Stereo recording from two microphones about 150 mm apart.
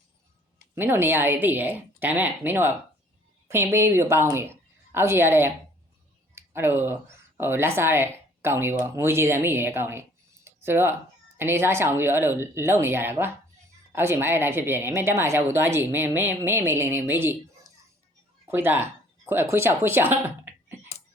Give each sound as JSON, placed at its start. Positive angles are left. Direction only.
{"t": 0.8, "sound": "a woman's voice", "side_deg": -15}
{"t": 6.3, "sound": "a sound", "side_deg": -15}
{"t": 7.3, "sound": "a woman's voice", "side_deg": -15}
{"t": 18.4, "sound": "speech", "side_deg": -15}